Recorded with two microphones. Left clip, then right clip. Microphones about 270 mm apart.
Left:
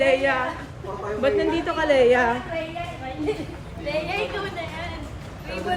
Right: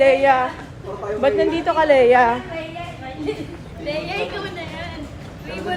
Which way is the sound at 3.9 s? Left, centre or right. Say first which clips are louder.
Right 1 dB; left.